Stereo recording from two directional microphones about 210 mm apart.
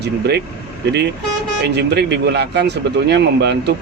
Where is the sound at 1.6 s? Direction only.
55° right (ahead or behind).